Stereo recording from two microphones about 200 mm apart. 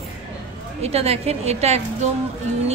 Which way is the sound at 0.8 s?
30° right (ahead or behind).